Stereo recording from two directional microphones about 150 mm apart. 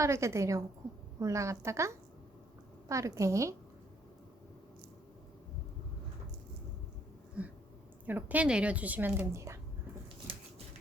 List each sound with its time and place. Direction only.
0.0 s a woman's voice: 20° right (ahead or behind)
7.4 s a woman's voice: 10° right (ahead or behind)